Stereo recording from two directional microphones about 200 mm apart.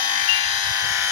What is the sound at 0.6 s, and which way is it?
Electric shaver, 20° right (ahead or behind).